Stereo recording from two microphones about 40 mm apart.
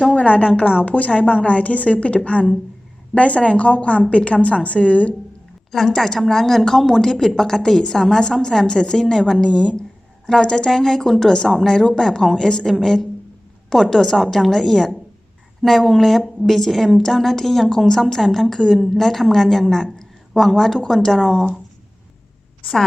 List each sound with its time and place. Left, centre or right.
0.2 s a woman's voice: left
5.7 s a woman's voice: centre